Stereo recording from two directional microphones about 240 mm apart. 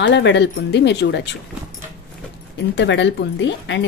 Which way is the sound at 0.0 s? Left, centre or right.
Left.